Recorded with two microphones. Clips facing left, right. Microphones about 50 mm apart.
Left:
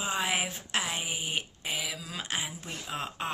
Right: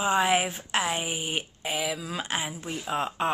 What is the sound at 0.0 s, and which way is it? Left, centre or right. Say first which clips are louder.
Speech: right 7 dB; centre.